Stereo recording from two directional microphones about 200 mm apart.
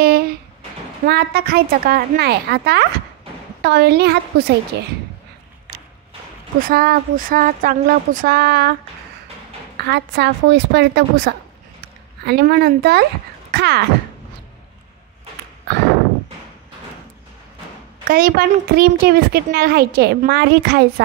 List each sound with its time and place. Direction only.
0.0 s a sound: 50° right (ahead or behind)
1.0 s a woman's voice: 50° right (ahead or behind)
6.7 s a woman's voice: 45° right (ahead or behind)
9.8 s a woman's voice: 55° right (ahead or behind)
18.0 s a woman's voice: 45° right (ahead or behind)